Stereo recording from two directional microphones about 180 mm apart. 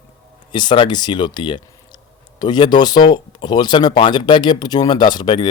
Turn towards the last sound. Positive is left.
turn(degrees=25)  # may be behind; listen again after turning